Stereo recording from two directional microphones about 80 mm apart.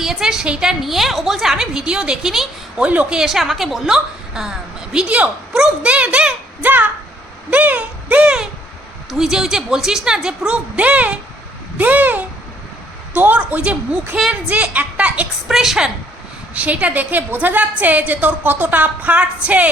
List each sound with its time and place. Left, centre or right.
0.0 s a woman's voice: centre
2.8 s a woman's voice: centre
3.2 s a woman's voice: centre
7.5 s a sound: centre
9.0 s a woman's voice: centre
14.2 s a woman's voice: centre
14.5 s a woman's voice: centre
15.4 s a woman's voice: centre
16.6 s a woman's voice: centre